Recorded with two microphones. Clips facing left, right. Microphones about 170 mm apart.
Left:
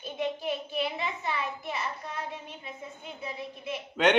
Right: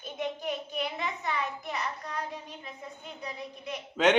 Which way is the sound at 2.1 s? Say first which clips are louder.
Right 1 dB; 40° right (ahead or behind).